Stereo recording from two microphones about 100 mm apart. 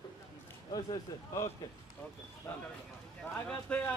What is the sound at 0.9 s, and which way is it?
Speech, 30° left (ahead or behind).